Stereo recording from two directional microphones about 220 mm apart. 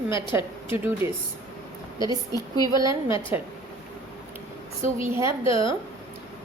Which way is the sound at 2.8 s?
15° right (ahead or behind).